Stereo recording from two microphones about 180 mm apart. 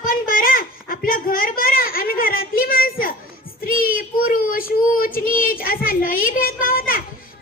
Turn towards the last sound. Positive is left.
turn(degrees=50)  # may be behind; listen again after turning